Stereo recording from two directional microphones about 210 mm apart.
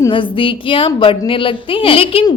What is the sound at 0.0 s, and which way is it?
A woman's voice, 25° left (ahead or behind).